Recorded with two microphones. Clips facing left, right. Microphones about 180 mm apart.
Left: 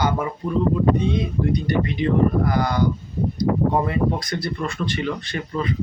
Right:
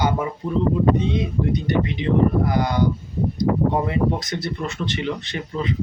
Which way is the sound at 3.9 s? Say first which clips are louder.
Even; 20° right (ahead or behind).